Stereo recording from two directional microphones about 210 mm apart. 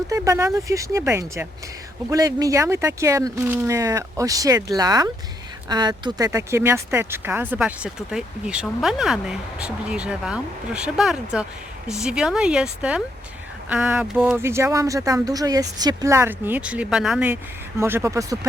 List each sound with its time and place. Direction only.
0.1 s speech: 15° right (ahead or behind)